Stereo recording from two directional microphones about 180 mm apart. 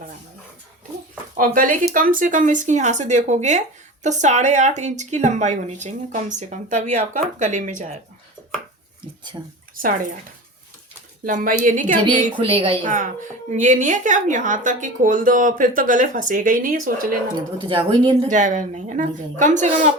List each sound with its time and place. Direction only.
1.4 s speech: 50° right (ahead or behind)
9.7 s speech: 50° right (ahead or behind)
11.3 s speech: 50° right (ahead or behind)
12.0 s a woman's voice: 25° right (ahead or behind)
12.8 s speech: 45° right (ahead or behind)
17.6 s a woman's voice: 25° right (ahead or behind)
18.3 s speech: 45° right (ahead or behind)